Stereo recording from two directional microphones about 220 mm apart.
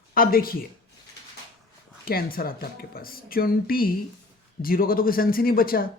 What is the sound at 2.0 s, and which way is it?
Speech, 40° left (ahead or behind).